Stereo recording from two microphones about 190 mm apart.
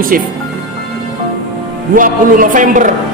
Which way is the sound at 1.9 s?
45° right (ahead or behind).